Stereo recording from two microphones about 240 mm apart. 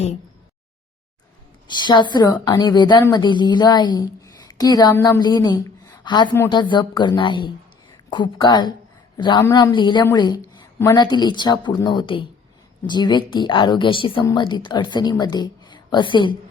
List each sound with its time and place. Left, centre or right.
1.6 s a woman's voice: centre